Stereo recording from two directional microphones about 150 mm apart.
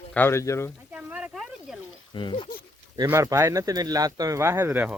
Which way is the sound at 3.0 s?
20° right (ahead or behind).